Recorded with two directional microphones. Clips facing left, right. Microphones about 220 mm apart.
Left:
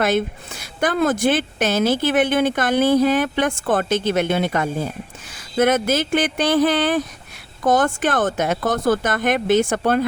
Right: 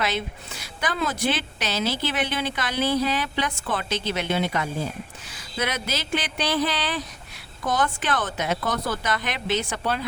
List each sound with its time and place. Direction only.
0.0 s speech: 50° left (ahead or behind)